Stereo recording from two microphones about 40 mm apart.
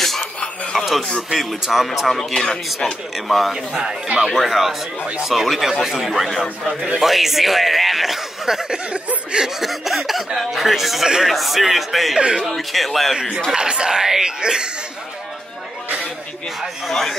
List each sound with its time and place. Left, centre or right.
0.0 s a sound: centre
1.3 s speech: centre
2.3 s speech: centre
3.3 s speech: centre
3.5 s speech: centre
4.3 s speech: centre
9.6 s speech: centre
11.3 s speech: centre
13.1 s speech: centre
16.6 s speech: centre